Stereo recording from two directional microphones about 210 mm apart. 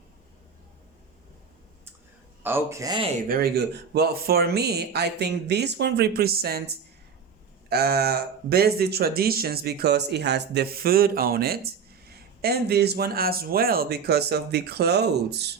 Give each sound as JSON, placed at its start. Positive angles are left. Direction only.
{"t": 2.4, "sound": "a man's voice", "side_deg": -10}
{"t": 3.2, "sound": "speech", "side_deg": -45}